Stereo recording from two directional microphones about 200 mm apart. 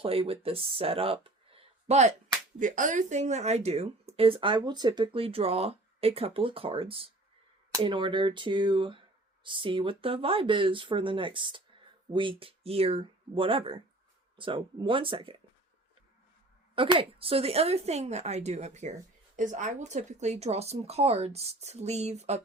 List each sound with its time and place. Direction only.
0.0 s speech: 30° right (ahead or behind)
16.7 s speech: 25° right (ahead or behind)